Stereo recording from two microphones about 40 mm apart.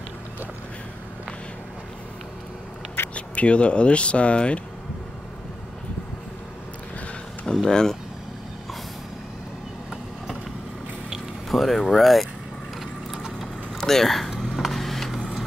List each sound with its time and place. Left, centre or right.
3.2 s speech: left
7.6 s speech: centre
11.4 s speech: centre
13.4 s vehicle: centre
14.5 s a sound: centre
15.1 s vehicle: centre